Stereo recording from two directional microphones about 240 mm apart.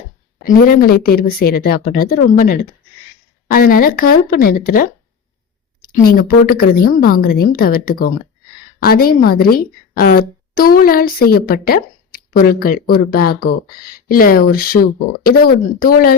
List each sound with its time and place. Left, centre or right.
0.4 s a woman's voice: left